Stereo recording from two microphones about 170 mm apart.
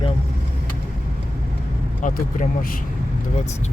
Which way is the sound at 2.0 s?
55° left (ahead or behind).